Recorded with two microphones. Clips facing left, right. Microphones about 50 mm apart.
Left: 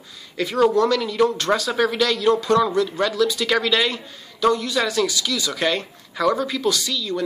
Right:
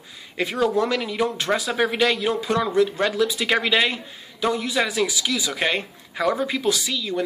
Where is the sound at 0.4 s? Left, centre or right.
Right.